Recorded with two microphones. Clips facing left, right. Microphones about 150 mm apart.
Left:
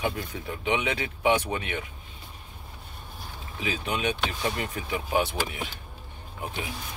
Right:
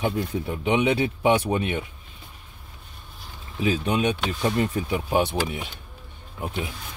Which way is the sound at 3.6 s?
40° right (ahead or behind).